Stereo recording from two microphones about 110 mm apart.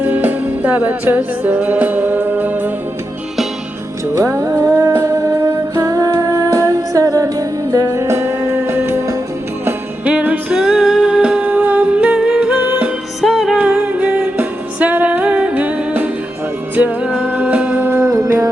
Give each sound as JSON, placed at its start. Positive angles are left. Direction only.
{"t": 0.0, "sound": "music", "side_deg": -15}
{"t": 4.1, "sound": "music", "side_deg": -25}
{"t": 4.9, "sound": "music", "side_deg": -30}
{"t": 13.2, "sound": "music", "side_deg": -5}
{"t": 13.7, "sound": "music", "side_deg": -15}
{"t": 18.1, "sound": "music", "side_deg": -30}